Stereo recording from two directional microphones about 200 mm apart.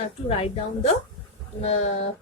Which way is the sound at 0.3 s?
30° left (ahead or behind).